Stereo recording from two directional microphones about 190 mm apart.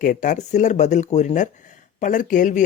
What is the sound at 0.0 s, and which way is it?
Speech, 45° left (ahead or behind).